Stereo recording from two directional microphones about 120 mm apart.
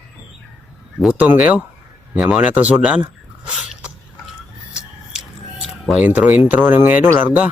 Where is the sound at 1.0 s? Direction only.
10° right (ahead or behind).